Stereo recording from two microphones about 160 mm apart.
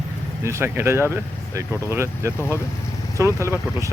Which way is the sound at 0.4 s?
15° right (ahead or behind).